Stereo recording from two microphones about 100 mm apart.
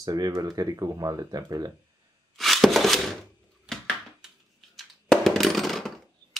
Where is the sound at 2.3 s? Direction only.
Centre (ahead or behind).